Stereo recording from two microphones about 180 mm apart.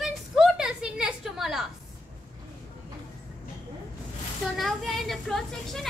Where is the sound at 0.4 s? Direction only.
5° right (ahead or behind).